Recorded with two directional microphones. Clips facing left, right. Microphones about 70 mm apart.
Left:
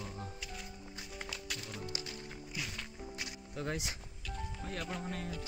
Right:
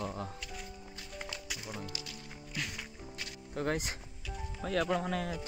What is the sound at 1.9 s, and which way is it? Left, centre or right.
Music, left.